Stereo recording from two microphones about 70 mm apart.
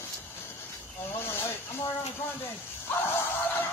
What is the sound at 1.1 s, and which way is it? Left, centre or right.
Snake, left.